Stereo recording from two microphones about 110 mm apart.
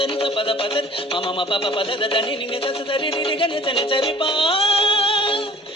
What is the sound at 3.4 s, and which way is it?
Music, 50° left (ahead or behind).